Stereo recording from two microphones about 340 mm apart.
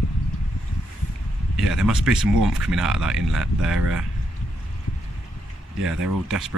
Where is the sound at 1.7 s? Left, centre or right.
Centre.